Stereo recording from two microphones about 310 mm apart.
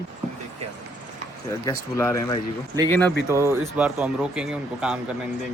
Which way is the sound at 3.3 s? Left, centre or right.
Centre.